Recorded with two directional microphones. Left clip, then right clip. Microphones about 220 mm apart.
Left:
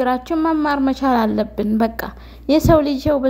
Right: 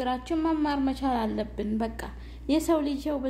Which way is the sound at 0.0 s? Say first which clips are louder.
Left 10 dB; 25° left (ahead or behind).